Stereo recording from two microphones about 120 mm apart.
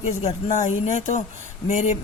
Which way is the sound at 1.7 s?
60° left (ahead or behind).